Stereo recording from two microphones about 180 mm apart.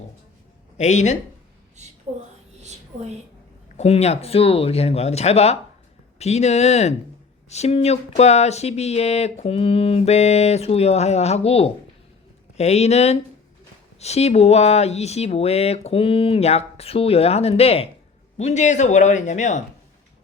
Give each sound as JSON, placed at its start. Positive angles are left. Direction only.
{"t": 0.8, "sound": "speech", "side_deg": 40}
{"t": 3.8, "sound": "speech", "side_deg": 35}